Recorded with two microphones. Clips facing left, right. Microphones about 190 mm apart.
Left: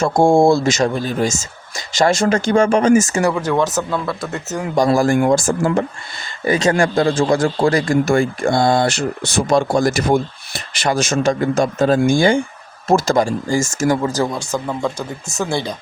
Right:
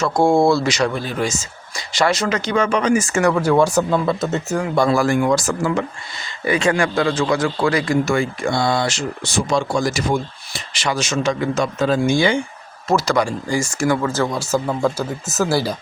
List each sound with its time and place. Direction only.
0.2 s speech: 45° left (ahead or behind)
3.0 s speech: 35° left (ahead or behind)
3.4 s speech: 10° right (ahead or behind)
4.8 s speech: 45° left (ahead or behind)
6.4 s speech: 40° left (ahead or behind)
14.0 s speech: 15° left (ahead or behind)
14.3 s speech: 5° right (ahead or behind)